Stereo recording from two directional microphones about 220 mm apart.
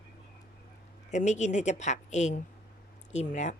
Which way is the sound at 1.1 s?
30° left (ahead or behind).